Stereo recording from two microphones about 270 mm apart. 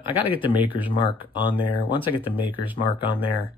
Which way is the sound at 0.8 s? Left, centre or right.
Centre.